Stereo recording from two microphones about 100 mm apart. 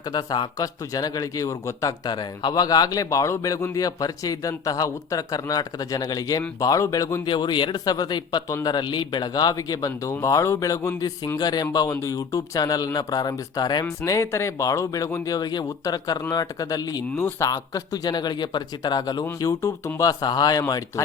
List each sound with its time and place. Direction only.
0.1 s a man's voice: 40° left (ahead or behind)
7.3 s speech: 50° left (ahead or behind)
8.4 s a man's voice: 30° left (ahead or behind)
8.7 s a man's voice: 50° left (ahead or behind)
13.8 s a man's voice: 30° left (ahead or behind)
17.2 s speech: 25° left (ahead or behind)
17.5 s speech: 40° left (ahead or behind)
19.4 s a man's voice: 30° left (ahead or behind)